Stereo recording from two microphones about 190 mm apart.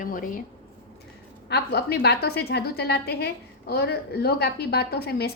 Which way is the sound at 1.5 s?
60° left (ahead or behind).